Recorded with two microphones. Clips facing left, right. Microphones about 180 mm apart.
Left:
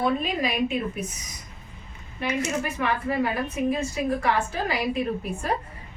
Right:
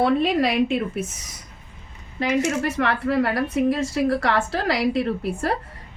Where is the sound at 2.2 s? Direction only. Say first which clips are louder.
Right 5 dB; 90° right.